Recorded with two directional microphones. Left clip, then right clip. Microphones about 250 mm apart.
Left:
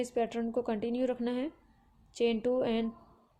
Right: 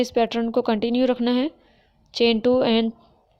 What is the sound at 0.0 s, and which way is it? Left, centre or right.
Speech, right.